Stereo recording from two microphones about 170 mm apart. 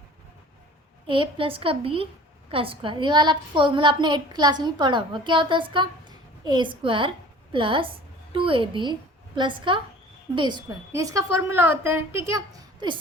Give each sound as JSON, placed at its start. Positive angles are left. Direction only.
{"t": 1.0, "sound": "a woman's voice", "side_deg": -30}